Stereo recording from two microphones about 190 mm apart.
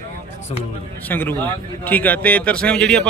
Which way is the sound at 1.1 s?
10° left (ahead or behind).